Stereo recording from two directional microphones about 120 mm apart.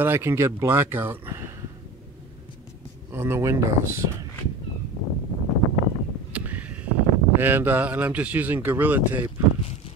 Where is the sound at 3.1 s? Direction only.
20° right (ahead or behind).